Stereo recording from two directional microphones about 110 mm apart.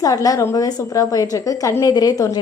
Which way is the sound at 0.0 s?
35° left (ahead or behind).